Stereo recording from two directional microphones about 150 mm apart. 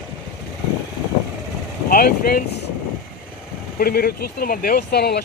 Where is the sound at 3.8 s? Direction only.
90° left.